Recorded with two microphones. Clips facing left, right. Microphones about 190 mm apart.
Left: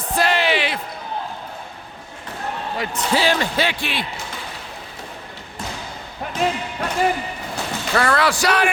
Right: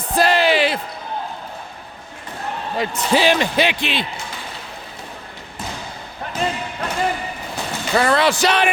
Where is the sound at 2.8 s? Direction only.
15° right (ahead or behind).